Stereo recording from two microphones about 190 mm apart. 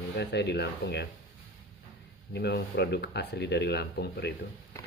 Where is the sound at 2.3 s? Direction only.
60° left (ahead or behind).